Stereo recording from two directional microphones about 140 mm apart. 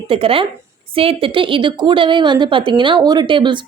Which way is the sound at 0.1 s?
40° right (ahead or behind).